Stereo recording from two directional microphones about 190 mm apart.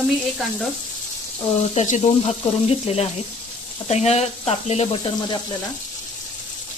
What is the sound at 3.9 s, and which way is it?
Speech, 35° left (ahead or behind).